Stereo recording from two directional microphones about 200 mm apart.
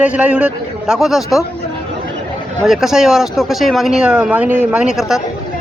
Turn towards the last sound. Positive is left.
turn(degrees=-5)  # may be behind; listen again after turning